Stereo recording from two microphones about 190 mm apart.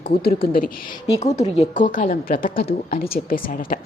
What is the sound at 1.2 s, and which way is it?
Speech, 35° left (ahead or behind).